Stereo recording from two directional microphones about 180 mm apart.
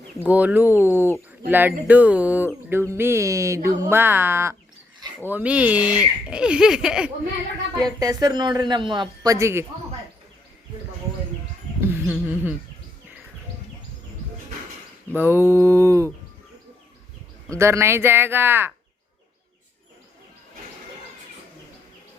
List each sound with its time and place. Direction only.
0.2 s speech: 10° right (ahead or behind)
7.9 s speech: 20° right (ahead or behind)
11.9 s speech: 10° right (ahead or behind)
15.1 s speech: 10° right (ahead or behind)
17.6 s speech: 15° right (ahead or behind)